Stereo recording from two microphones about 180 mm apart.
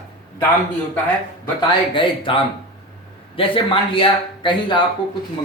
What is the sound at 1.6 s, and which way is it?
Speech, 25° left (ahead or behind).